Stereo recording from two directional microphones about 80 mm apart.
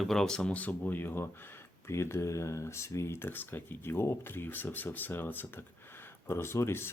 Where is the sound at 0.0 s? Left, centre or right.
Centre.